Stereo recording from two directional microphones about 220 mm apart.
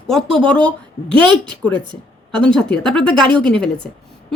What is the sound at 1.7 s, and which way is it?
Speech, 20° right (ahead or behind).